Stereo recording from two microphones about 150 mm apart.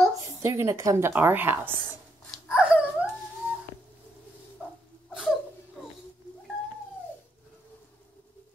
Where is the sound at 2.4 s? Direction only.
5° right (ahead or behind).